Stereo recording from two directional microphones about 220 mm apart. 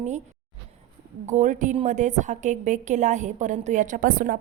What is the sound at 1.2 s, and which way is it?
A woman's voice, 35° right (ahead or behind).